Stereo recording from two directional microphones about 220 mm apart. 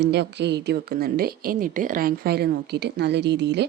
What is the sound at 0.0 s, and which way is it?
A woman's voice, 50° right (ahead or behind).